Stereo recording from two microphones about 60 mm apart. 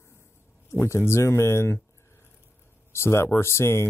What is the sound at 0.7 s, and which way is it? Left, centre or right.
Speech, left.